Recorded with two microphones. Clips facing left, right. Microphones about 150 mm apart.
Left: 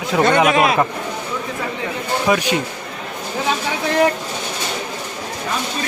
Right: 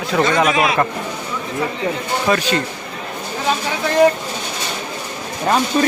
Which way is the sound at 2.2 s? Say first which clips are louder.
Even; 15° left (ahead or behind).